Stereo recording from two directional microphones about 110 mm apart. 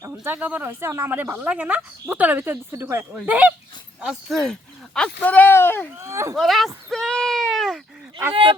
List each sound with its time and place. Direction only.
0.1 s speech: 15° right (ahead or behind)
4.0 s speech: centre (ahead or behind); by 5.9 s 20° left (ahead or behind)
6.0 s speech: 25° right (ahead or behind)
6.3 s speech: centre (ahead or behind)
6.9 s a sound: 5° left (ahead or behind)
8.3 s speech: 50° right (ahead or behind)